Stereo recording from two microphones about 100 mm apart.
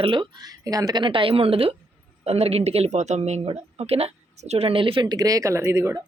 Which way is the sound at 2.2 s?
90° right.